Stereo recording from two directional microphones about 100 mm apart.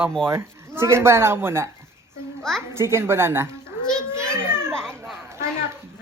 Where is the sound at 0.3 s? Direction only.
25° right (ahead or behind).